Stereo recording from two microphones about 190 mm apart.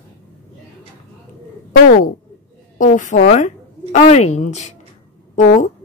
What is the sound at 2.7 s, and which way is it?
A woman's voice, 45° left (ahead or behind).